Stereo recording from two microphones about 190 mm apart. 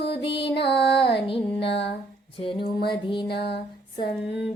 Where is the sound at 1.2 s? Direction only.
30° left (ahead or behind).